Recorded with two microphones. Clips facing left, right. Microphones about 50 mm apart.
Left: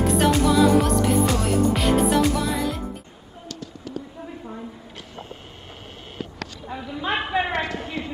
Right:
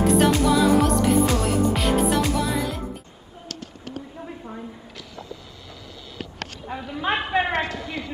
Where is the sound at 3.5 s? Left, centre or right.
Right.